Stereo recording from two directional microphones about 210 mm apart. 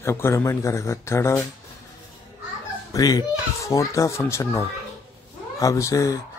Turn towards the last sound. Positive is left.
turn(degrees=15)  # may be behind; listen again after turning